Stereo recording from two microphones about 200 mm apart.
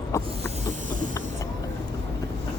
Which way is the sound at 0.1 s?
15° left (ahead or behind).